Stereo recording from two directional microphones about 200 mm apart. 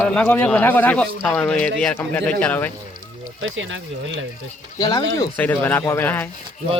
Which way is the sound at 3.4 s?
70° right (ahead or behind).